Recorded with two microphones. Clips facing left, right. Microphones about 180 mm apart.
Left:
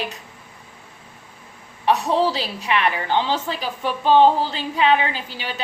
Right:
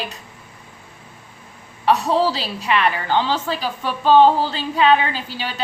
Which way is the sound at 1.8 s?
15° left (ahead or behind).